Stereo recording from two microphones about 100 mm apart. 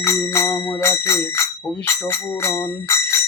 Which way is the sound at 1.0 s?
30° left (ahead or behind).